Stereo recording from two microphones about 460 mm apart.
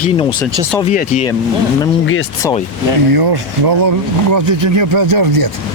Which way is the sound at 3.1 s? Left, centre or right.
Right.